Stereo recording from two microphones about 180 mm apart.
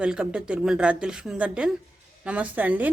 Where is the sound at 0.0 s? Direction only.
5° right (ahead or behind).